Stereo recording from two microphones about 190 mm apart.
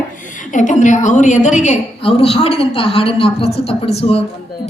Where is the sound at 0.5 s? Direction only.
40° left (ahead or behind).